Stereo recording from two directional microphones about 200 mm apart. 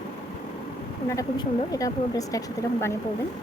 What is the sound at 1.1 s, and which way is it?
Speech, 15° left (ahead or behind).